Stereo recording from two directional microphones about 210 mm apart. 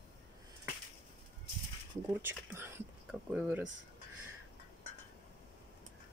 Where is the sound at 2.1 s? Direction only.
10° right (ahead or behind).